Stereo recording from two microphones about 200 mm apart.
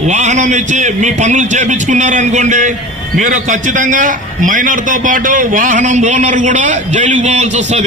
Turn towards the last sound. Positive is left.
turn(degrees=-35)  # may be behind; listen again after turning